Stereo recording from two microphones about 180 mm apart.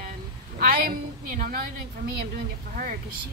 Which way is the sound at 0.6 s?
55° right (ahead or behind).